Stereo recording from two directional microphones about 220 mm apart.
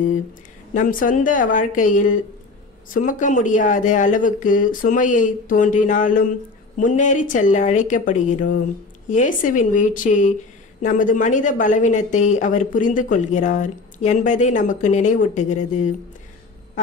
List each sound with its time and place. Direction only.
0.7 s speech: 35° left (ahead or behind)